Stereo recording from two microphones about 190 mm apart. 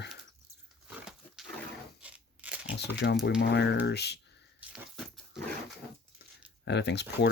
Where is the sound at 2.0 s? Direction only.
10° right (ahead or behind).